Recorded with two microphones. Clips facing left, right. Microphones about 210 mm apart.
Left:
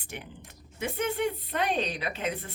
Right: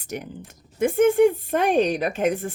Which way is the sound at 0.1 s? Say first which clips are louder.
Right 10 dB; 40° right (ahead or behind).